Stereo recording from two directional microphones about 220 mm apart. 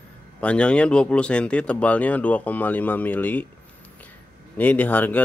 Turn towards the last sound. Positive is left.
turn(degrees=5)  # may be behind; listen again after turning